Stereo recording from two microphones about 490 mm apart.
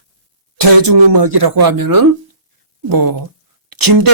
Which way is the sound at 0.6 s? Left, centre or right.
Right.